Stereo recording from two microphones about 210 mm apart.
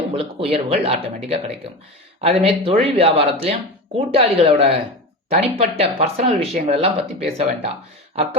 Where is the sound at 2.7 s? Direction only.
30° right (ahead or behind).